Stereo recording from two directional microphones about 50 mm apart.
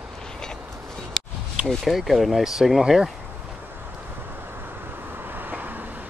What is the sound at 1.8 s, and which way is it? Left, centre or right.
Speech, centre.